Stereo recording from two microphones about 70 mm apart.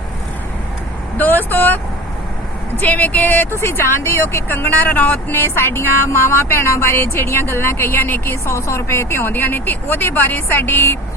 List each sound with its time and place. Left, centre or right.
1.1 s speech: left
2.8 s speech: left
3.6 s speech: left
5.4 s speech: left